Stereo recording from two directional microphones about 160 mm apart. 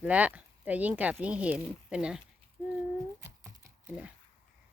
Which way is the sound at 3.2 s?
15° right (ahead or behind).